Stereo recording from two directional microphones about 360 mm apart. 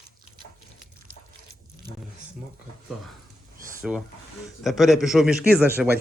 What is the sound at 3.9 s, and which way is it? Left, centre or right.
A man's voice, centre.